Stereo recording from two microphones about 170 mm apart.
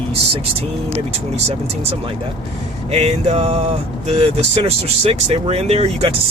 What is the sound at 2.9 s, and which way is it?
Speech, 35° right (ahead or behind).